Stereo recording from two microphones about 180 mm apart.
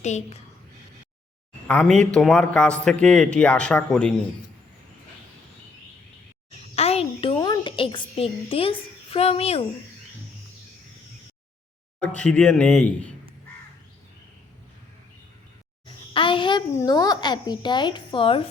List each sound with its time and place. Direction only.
0.0 s a woman's voice: 40° left (ahead or behind)
1.6 s speech: 5° left (ahead or behind)
6.7 s a child's voice: 35° left (ahead or behind)
12.0 s speech: 5° left (ahead or behind)
16.1 s a child's voice: 30° left (ahead or behind)